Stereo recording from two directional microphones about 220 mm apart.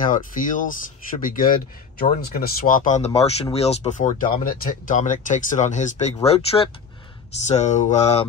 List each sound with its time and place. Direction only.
0.0 s speech: 35° left (ahead or behind)